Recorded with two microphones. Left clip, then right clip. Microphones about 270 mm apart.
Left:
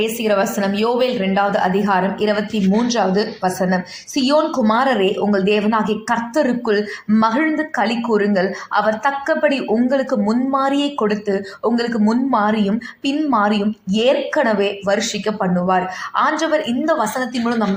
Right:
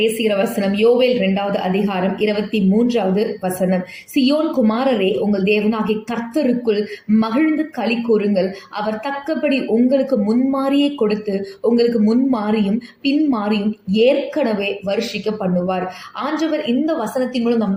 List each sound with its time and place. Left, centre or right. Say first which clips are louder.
0.0 s a woman's voice: even; left
0.9 s a man's voice: right 2 dB; left
1.4 s a woman's voice: left 3 dB; left